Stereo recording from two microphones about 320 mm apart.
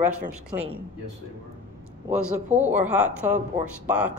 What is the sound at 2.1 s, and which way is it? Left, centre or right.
Speech, right.